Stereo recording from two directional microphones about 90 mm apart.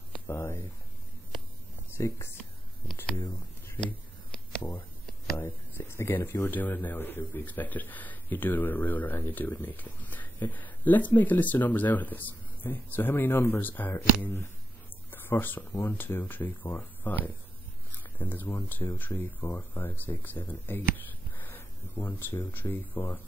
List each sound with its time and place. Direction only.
0.3 s speech: 30° left (ahead or behind)
2.0 s speech: 30° left (ahead or behind)
5.4 s speech: 25° left (ahead or behind)
21.4 s a sound: 25° left (ahead or behind)
22.5 s speech: 25° left (ahead or behind)